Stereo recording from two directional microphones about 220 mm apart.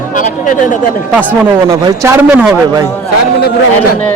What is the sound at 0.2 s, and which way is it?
Speech, 35° left (ahead or behind).